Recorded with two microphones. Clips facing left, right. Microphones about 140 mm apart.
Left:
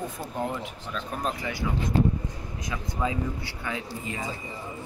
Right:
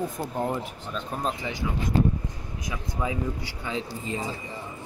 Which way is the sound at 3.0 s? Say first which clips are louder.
Even; 15° right (ahead or behind).